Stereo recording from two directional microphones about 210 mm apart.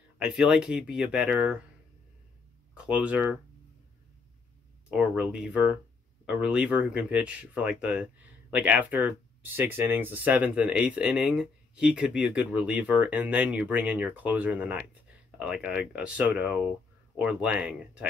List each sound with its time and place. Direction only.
0.2 s speech: centre (ahead or behind)
2.9 s speech: 5° right (ahead or behind)
4.9 s speech: 5° right (ahead or behind)